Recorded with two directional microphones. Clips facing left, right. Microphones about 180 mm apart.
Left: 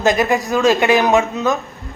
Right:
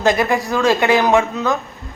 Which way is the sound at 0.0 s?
20° left (ahead or behind).